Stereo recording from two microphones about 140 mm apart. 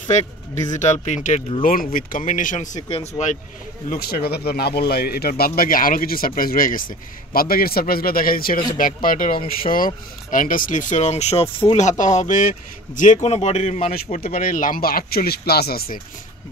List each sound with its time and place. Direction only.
0.7 s speech: 55° left (ahead or behind)
1.6 s speech: 90° left; by 2.7 s 65° left (ahead or behind)
2.9 s speech: 50° left (ahead or behind)
3.9 s a man's voice: 90° left
8.7 s speech: 75° left (ahead or behind); by 16.0 s 90° left